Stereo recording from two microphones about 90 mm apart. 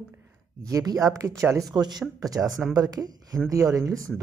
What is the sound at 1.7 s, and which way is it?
Speech, 50° right (ahead or behind).